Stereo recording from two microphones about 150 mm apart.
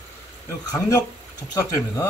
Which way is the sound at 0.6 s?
25° left (ahead or behind).